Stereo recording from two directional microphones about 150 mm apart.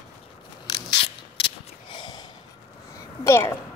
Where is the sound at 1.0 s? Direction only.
35° left (ahead or behind).